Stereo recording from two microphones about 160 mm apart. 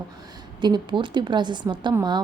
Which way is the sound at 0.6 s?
30° right (ahead or behind).